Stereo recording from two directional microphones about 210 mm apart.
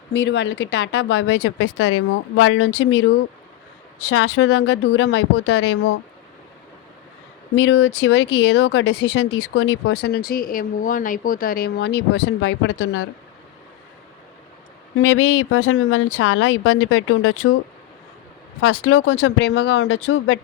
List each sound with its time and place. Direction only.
0.1 s speech: 55° left (ahead or behind)
4.1 s speech: 65° left (ahead or behind)
7.5 s speech: 60° left (ahead or behind)
14.9 s speech: 75° left (ahead or behind)
18.6 s speech: 75° left (ahead or behind)